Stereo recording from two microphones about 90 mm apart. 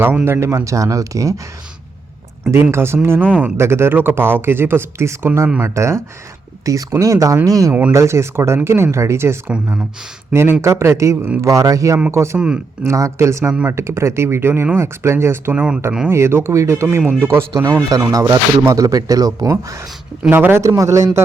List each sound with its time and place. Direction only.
0.0 s speech: 20° right (ahead or behind)
0.3 s speech: 35° right (ahead or behind)
2.7 s speech: 30° right (ahead or behind)
7.7 s speech: 15° right (ahead or behind)
7.9 s speech: 30° right (ahead or behind)
17.9 s speech: 40° right (ahead or behind)
20.3 s speech: 25° right (ahead or behind)